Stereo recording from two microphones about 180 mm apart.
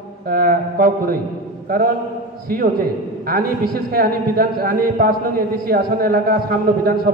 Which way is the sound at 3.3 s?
55° right (ahead or behind).